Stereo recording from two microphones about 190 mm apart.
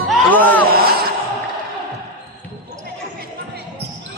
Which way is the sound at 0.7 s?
55° right (ahead or behind).